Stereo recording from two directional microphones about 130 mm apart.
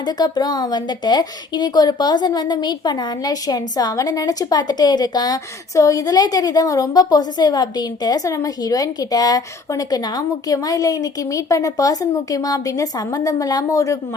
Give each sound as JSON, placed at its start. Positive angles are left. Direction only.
{"t": 0.0, "sound": "a woman's voice", "side_deg": 35}